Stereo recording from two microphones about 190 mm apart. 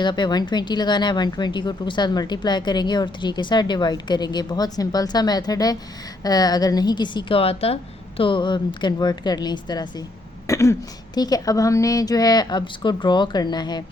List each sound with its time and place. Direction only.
0.0 s speech: 25° left (ahead or behind)